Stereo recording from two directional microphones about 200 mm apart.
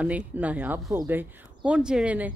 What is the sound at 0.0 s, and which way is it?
Speech, 5° right (ahead or behind).